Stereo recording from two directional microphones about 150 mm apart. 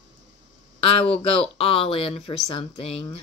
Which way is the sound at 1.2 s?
40° left (ahead or behind).